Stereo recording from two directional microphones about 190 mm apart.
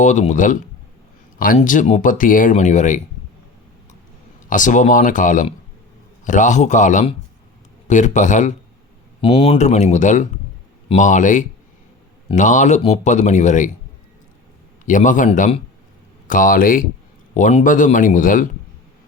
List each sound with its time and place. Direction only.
0.0 s speech: 40° left (ahead or behind)
4.4 s a man's voice: 45° left (ahead or behind)
9.2 s speech: 30° left (ahead or behind)
14.8 s a man's voice: 45° left (ahead or behind)
16.2 s a man's voice: 45° left (ahead or behind)